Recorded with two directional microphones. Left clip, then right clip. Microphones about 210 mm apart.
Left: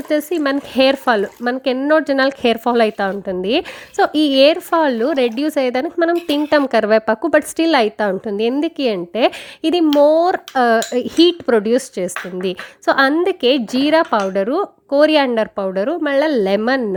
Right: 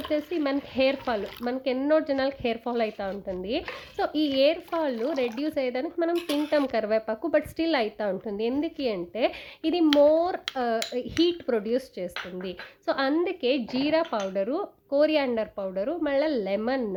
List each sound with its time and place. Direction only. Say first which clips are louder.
0.1 s speech: left 10 dB; 50° left (ahead or behind)